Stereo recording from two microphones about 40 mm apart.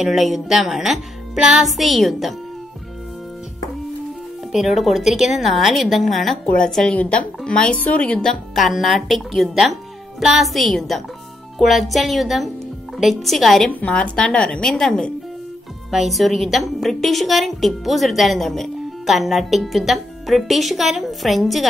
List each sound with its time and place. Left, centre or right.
0.0 s speech: centre
1.8 s a woman's voice: centre
4.5 s a woman's voice: centre
6.5 s a woman's voice: centre
7.0 s speech: left
7.4 s a woman's voice: left
7.7 s speech: left
8.5 s a woman's voice: centre
13.8 s a woman's voice: left
14.6 s a woman's voice: centre
15.9 s a woman's voice: centre